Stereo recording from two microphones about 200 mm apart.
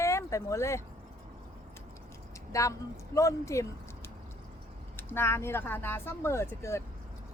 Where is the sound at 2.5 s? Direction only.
15° left (ahead or behind).